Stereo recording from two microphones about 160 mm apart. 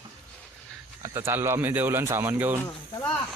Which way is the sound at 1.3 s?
15° right (ahead or behind).